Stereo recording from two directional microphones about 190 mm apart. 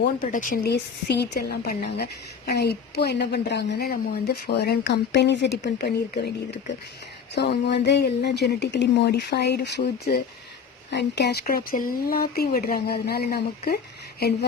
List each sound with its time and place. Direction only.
0.2 s a woman's voice: 45° left (ahead or behind)